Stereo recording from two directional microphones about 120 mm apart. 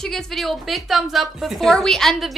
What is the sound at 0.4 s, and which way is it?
A woman's voice, centre (ahead or behind).